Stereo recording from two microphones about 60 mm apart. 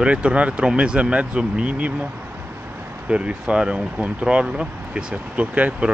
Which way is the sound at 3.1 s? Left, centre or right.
Centre.